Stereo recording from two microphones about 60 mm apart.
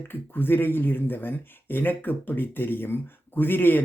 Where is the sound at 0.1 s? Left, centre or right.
Left.